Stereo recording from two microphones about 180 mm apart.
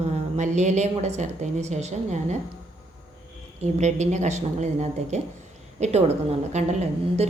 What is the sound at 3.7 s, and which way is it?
A woman's voice, 40° right (ahead or behind).